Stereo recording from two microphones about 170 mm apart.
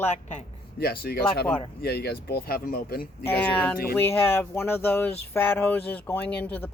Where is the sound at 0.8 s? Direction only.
65° left (ahead or behind).